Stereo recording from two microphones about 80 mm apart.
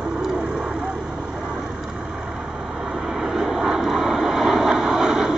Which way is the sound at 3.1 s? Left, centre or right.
Centre.